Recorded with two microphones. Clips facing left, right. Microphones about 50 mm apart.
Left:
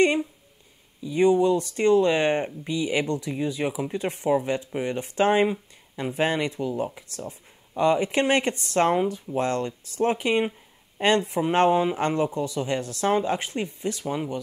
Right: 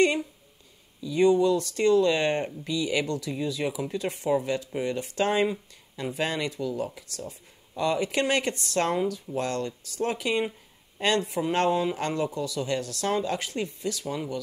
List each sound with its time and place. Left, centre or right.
0.0 s speech: left